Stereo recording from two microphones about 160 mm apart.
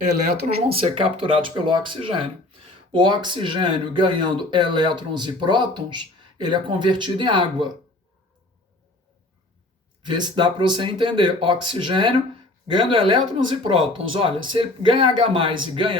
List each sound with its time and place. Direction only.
0.4 s speech: 35° right (ahead or behind)
10.0 s speech: 30° right (ahead or behind)